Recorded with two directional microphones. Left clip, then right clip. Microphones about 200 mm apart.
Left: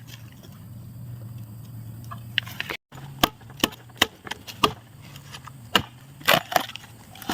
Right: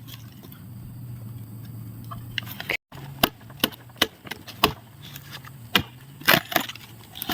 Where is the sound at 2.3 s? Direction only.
10° right (ahead or behind).